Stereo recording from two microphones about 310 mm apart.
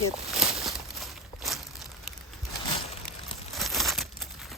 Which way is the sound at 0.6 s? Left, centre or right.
Centre.